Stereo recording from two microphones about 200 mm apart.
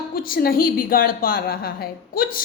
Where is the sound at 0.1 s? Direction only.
45° left (ahead or behind).